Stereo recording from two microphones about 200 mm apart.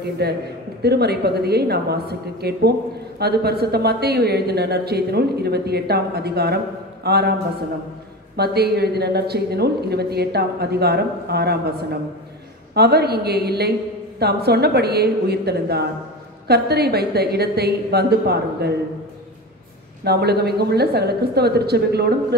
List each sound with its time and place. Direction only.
0.2 s a man's voice: 55° right (ahead or behind)
8.4 s a woman's voice: 55° right (ahead or behind)
20.1 s a woman's voice: 55° right (ahead or behind)